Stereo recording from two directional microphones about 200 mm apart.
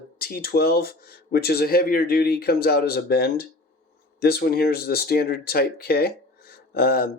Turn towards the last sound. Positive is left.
turn(degrees=50)  # may be behind; listen again after turning